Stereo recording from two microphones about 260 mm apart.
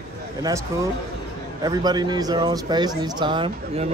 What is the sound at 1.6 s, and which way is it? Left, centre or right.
Speech, centre.